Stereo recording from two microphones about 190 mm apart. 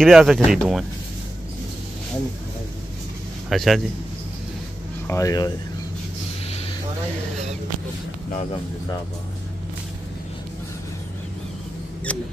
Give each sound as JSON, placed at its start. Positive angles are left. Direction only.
{"t": 0.0, "sound": "speech", "side_deg": 0}
{"t": 3.4, "sound": "a man's voice", "side_deg": 0}
{"t": 5.0, "sound": "speech", "side_deg": 15}
{"t": 12.1, "sound": "speech", "side_deg": 5}